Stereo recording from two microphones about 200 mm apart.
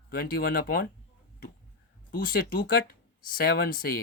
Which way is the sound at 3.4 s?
50° left (ahead or behind).